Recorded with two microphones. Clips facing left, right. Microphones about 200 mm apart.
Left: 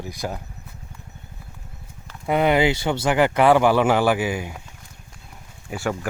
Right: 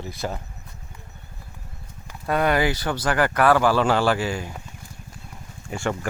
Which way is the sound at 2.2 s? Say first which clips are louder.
Left 3 dB; 20° left (ahead or behind).